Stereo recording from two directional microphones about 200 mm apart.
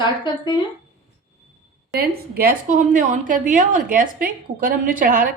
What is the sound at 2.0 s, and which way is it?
A woman's voice, 50° right (ahead or behind).